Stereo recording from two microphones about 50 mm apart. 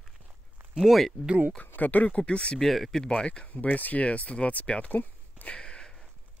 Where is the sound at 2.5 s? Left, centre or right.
Centre.